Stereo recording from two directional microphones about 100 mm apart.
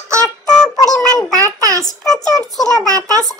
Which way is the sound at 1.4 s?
35° right (ahead or behind).